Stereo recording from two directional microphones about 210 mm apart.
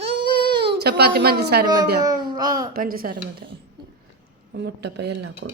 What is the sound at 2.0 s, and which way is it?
Speech, 20° right (ahead or behind).